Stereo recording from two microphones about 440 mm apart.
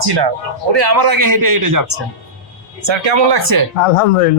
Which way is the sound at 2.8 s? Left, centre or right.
Right.